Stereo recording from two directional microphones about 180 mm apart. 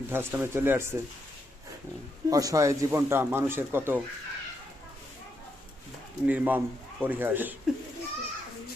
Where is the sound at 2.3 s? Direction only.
20° right (ahead or behind).